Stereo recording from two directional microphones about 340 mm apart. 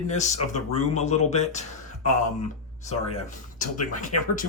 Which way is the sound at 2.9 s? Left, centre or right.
Left.